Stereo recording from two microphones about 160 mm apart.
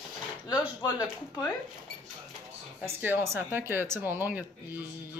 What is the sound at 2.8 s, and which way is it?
Speech, 10° right (ahead or behind).